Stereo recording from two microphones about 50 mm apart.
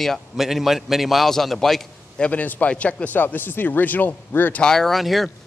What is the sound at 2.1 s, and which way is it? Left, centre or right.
A man's voice, left.